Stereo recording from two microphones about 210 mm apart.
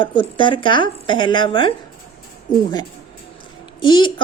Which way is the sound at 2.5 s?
40° left (ahead or behind).